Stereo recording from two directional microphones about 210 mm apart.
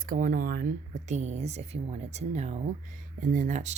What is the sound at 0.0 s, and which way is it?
Speech, 40° right (ahead or behind).